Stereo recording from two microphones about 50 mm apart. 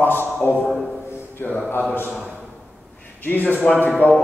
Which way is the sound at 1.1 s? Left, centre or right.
Left.